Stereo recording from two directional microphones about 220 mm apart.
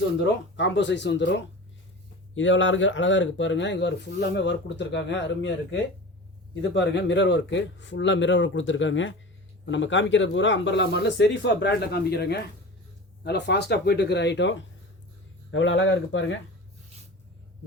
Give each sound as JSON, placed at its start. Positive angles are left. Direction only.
{"t": 0.5, "sound": "speech", "side_deg": 55}